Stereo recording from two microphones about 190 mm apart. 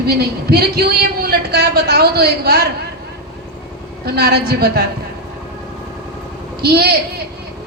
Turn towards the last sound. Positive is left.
turn(degrees=-55)  # may be behind; listen again after turning